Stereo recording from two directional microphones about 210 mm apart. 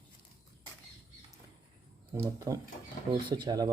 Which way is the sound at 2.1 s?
15° right (ahead or behind).